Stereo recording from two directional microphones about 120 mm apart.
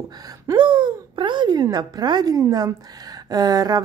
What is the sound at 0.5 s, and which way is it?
A woman's voice, 40° right (ahead or behind).